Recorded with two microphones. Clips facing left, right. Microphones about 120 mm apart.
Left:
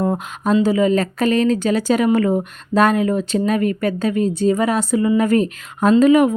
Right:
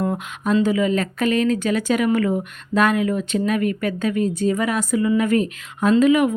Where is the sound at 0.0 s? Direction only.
35° left (ahead or behind).